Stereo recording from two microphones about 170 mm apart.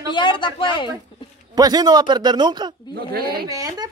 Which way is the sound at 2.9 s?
65° right (ahead or behind).